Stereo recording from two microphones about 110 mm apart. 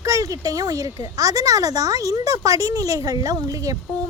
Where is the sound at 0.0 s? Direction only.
30° right (ahead or behind).